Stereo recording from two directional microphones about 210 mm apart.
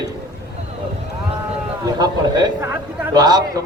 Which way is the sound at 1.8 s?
20° right (ahead or behind).